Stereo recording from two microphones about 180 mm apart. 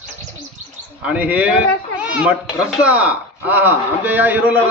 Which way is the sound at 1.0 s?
10° right (ahead or behind).